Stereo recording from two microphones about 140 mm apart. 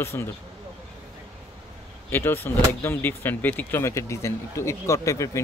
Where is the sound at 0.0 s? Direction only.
20° left (ahead or behind).